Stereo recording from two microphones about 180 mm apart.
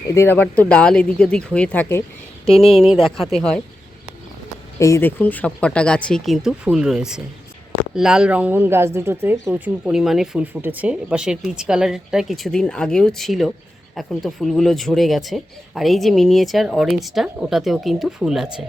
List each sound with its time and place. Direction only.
0.1 s speech: 15° left (ahead or behind)
2.5 s speech: 30° left (ahead or behind)
2.9 s speech: centre (ahead or behind)
4.8 s speech: 15° left (ahead or behind); by 18.6 s 5° right (ahead or behind)